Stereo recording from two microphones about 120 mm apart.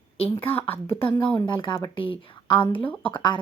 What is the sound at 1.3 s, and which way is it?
A woman's voice, 40° left (ahead or behind).